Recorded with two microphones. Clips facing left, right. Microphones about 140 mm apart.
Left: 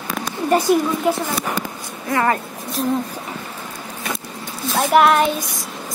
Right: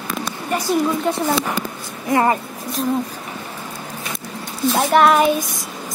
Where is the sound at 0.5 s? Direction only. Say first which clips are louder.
Left 6 dB; 40° left (ahead or behind).